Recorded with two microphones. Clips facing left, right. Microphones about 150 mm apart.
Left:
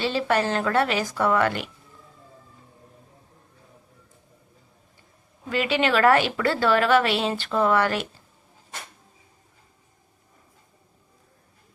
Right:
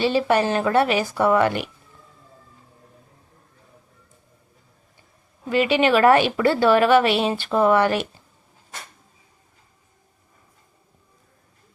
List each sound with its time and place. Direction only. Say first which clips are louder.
0.0 s a woman's voice: right 4 dB; 15° right (ahead or behind)
5.5 s a woman's voice: right 5 dB; 20° right (ahead or behind)